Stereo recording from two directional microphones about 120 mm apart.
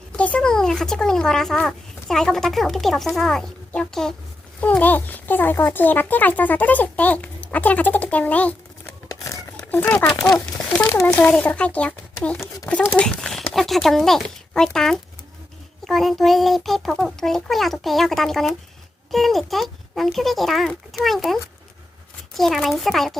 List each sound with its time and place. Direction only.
0.2 s a child's voice: 10° left (ahead or behind)
9.0 s a sound: 25° left (ahead or behind)
9.7 s speech: 15° left (ahead or behind)
10.2 s speech: 5° left (ahead or behind)
22.4 s speech: centre (ahead or behind)